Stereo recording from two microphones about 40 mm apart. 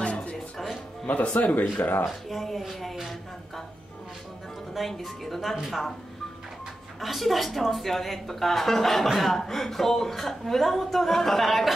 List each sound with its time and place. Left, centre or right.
0.0 s music: left
1.0 s speech: left
2.0 s a woman's voice: centre
4.7 s a woman's voice: centre
7.0 s a woman's voice: centre